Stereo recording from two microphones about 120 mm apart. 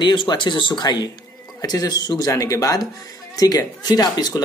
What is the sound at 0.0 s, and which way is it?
Speech, 40° left (ahead or behind).